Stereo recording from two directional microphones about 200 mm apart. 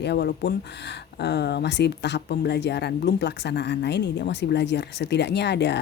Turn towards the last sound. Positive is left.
turn(degrees=60)  # may be behind; listen again after turning